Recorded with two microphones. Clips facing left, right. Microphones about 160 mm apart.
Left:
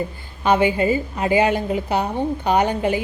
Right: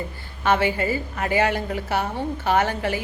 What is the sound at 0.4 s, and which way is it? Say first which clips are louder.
A woman's voice: left 4 dB; 15° left (ahead or behind).